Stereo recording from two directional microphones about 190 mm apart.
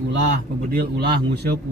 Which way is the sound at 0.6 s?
55° right (ahead or behind).